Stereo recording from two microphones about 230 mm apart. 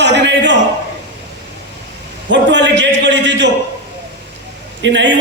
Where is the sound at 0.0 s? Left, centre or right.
Right.